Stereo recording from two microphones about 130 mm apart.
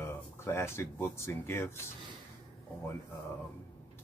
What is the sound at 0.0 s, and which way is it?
Speech, 20° left (ahead or behind).